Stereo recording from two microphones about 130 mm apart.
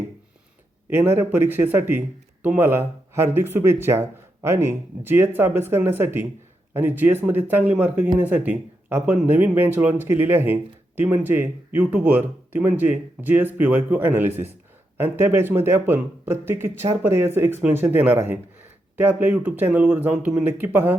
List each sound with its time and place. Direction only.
0.9 s speech: 15° right (ahead or behind)